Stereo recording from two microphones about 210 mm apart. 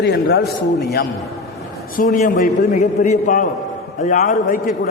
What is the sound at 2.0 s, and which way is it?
A man's voice, 40° left (ahead or behind).